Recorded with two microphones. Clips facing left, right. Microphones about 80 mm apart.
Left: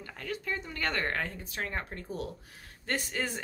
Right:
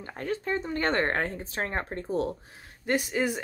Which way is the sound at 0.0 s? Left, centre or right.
Right.